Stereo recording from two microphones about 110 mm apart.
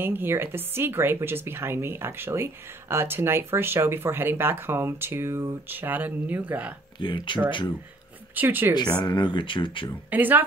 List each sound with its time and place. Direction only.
0.0 s speech: 20° right (ahead or behind)
7.0 s speech: 45° left (ahead or behind)
8.4 s speech: 20° right (ahead or behind)
9.0 s speech: 45° left (ahead or behind)
10.0 s speech: 15° right (ahead or behind)